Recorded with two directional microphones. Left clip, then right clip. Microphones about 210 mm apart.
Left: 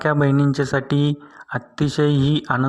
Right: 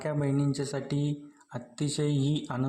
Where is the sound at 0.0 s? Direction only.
25° left (ahead or behind).